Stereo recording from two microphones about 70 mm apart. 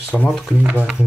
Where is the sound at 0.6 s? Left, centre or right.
Right.